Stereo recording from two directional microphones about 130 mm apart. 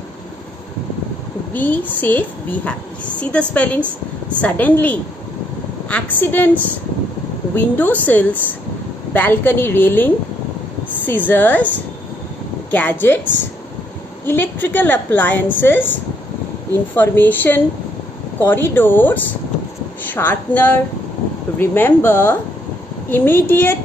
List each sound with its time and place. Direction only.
1.5 s a woman's voice: 15° left (ahead or behind)
7.5 s a woman's voice: 15° left (ahead or behind)
12.7 s a woman's voice: 15° left (ahead or behind)
14.2 s a woman's voice: 15° left (ahead or behind)